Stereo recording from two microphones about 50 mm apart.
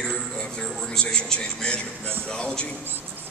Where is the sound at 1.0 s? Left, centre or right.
Centre.